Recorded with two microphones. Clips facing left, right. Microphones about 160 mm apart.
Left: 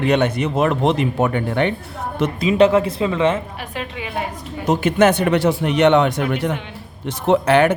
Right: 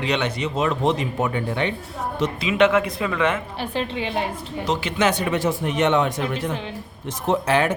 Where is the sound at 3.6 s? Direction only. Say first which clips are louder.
Right 3 dB; 30° right (ahead or behind).